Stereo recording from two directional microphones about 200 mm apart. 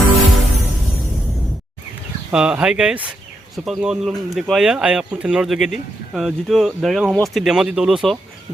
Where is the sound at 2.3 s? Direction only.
5° right (ahead or behind).